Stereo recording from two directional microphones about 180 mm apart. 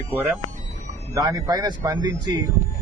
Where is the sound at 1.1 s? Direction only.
20° right (ahead or behind).